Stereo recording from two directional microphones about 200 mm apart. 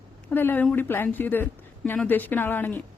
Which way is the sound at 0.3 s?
10° left (ahead or behind).